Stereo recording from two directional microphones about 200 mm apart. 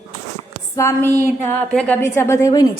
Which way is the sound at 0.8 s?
15° left (ahead or behind).